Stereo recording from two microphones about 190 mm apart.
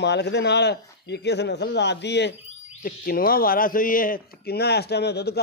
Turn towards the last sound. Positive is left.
turn(degrees=60)  # may be behind; listen again after turning